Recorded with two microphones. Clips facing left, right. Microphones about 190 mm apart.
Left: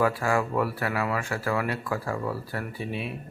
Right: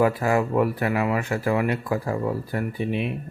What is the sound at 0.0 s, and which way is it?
Speech, 20° right (ahead or behind).